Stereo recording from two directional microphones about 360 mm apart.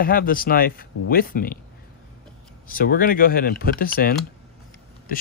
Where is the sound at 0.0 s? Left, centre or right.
Left.